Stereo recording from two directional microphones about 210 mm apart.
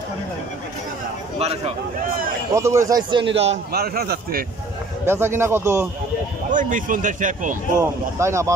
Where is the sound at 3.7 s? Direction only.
45° right (ahead or behind).